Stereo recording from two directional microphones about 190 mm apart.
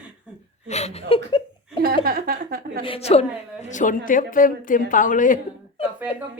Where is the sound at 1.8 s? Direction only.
50° right (ahead or behind).